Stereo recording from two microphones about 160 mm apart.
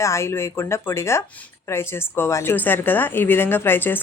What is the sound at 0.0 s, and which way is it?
A woman's voice, 15° left (ahead or behind).